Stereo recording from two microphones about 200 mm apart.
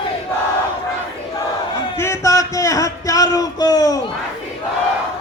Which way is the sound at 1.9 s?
15° left (ahead or behind).